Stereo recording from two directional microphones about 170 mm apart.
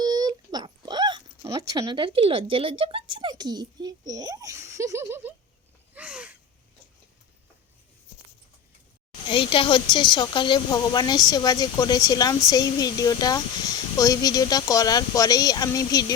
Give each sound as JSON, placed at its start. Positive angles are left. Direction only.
{"t": 0.0, "sound": "speech", "side_deg": -25}
{"t": 5.9, "sound": "a sound", "side_deg": -5}
{"t": 9.2, "sound": "speech", "side_deg": 30}